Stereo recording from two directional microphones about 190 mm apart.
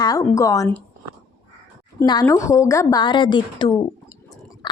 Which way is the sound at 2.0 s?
15° left (ahead or behind).